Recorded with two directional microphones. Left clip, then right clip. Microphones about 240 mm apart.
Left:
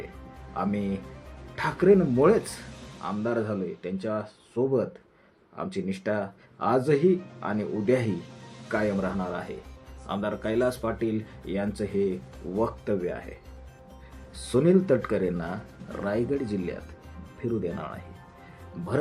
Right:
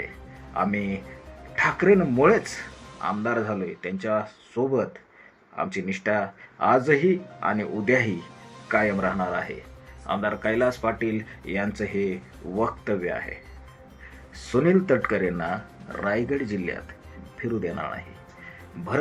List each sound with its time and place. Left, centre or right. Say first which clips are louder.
0.5 s speech: right 4 dB; centre
14.5 s speech: right 1 dB; centre